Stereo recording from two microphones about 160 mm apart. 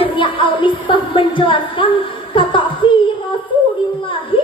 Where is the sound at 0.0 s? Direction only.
30° left (ahead or behind).